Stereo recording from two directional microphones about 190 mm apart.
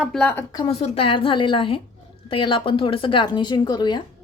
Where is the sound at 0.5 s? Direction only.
30° left (ahead or behind).